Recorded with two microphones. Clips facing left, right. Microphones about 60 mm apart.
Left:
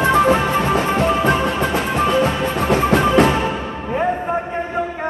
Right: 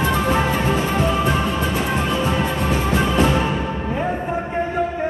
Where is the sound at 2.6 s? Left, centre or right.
Left.